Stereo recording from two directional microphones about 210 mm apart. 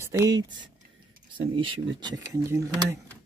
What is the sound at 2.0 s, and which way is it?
Speech, 15° right (ahead or behind).